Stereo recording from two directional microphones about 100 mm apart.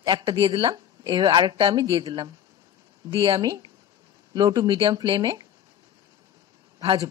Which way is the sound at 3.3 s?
40° right (ahead or behind).